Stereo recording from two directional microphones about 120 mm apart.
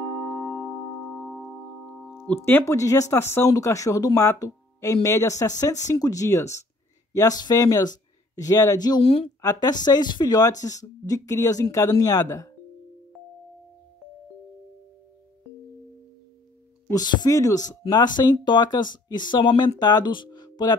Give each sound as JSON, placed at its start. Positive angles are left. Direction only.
{"t": 1.1, "sound": "singing bowl", "side_deg": 0}
{"t": 2.2, "sound": "speech", "side_deg": 15}
{"t": 9.0, "sound": "speech", "side_deg": 50}
{"t": 9.4, "sound": "speech", "side_deg": 30}
{"t": 16.9, "sound": "speech", "side_deg": 35}